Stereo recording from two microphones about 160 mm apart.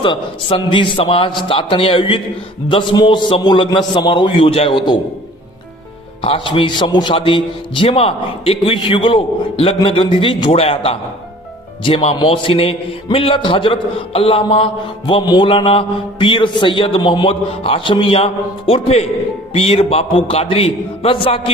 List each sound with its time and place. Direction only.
0.0 s a man's voice: 30° left (ahead or behind)
6.2 s a man's voice: 30° left (ahead or behind)